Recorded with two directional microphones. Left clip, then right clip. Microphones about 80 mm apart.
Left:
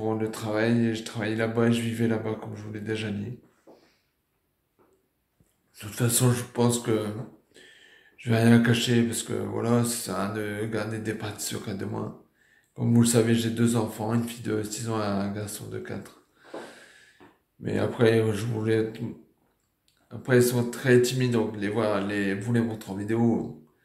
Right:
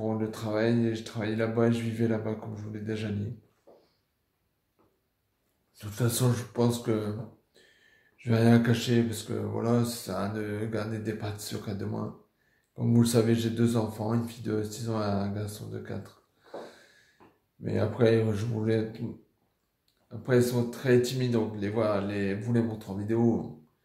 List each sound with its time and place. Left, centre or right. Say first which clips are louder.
0.0 s speech: left 3 dB; right
5.8 s speech: left 3 dB; right
8.2 s speech: left 3 dB; right
20.1 s speech: left 4 dB; right